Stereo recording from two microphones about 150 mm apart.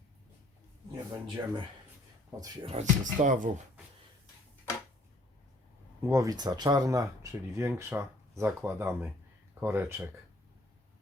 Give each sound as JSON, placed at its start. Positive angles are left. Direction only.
{"t": 1.4, "sound": "speech", "side_deg": -30}
{"t": 2.6, "sound": "speech", "side_deg": -50}
{"t": 6.0, "sound": "speech", "side_deg": -20}